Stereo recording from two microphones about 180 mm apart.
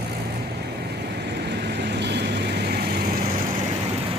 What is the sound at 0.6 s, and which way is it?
Vehicle, 65° right (ahead or behind).